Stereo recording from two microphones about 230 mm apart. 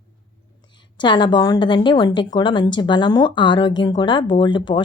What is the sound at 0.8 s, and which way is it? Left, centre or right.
A woman's voice, centre.